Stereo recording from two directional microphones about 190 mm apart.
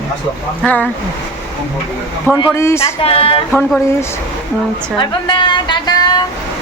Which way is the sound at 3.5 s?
Centre (ahead or behind).